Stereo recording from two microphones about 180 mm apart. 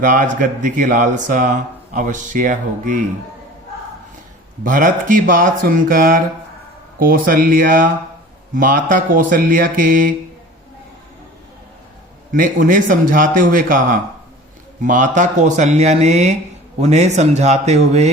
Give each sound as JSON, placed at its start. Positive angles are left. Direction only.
{"t": 0.0, "sound": "speech", "side_deg": -50}
{"t": 4.6, "sound": "speech", "side_deg": -45}
{"t": 12.3, "sound": "speech", "side_deg": -45}